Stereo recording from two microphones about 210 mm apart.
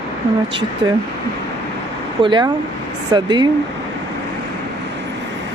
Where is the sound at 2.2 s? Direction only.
20° right (ahead or behind).